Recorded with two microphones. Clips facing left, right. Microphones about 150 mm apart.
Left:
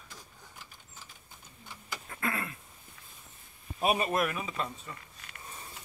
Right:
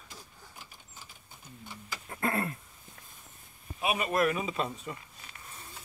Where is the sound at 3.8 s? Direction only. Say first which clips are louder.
Left 3 dB; 35° left (ahead or behind).